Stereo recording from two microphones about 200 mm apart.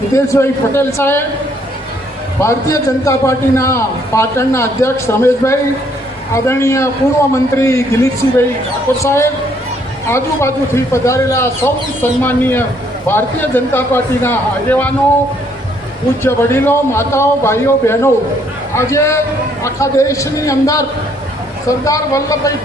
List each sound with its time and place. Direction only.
0.1 s a man's voice: 15° left (ahead or behind)
2.4 s a man's voice: 15° left (ahead or behind)
9.0 s a man's voice: 15° left (ahead or behind)
16.2 s a man's voice: 10° left (ahead or behind)